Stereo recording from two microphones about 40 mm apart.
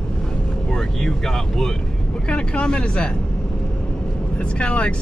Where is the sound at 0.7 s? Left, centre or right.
Centre.